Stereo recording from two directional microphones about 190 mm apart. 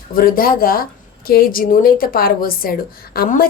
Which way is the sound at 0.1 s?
50° left (ahead or behind).